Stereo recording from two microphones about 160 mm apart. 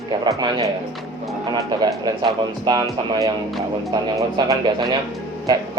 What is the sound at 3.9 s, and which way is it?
Speech, 20° right (ahead or behind).